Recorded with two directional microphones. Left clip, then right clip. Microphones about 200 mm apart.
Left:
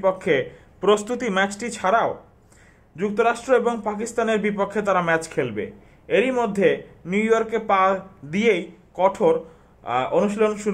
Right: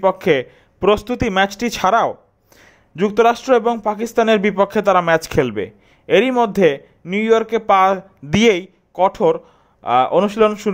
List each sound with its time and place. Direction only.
0.0 s speech: 40° right (ahead or behind)